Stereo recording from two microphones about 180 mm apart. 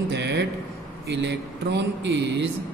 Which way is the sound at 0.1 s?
70° right (ahead or behind).